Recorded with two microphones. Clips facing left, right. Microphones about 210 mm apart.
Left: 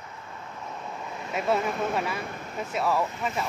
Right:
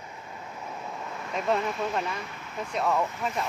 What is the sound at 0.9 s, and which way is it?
Vehicle, 5° left (ahead or behind).